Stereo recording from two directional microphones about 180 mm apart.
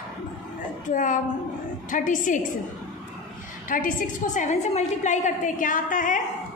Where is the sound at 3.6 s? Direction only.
50° left (ahead or behind).